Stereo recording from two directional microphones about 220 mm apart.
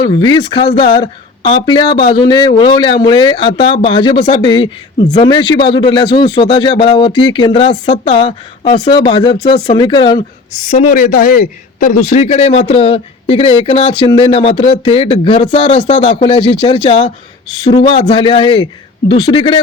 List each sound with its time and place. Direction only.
0.0 s speech: 20° left (ahead or behind)
10.7 s speech: 35° left (ahead or behind)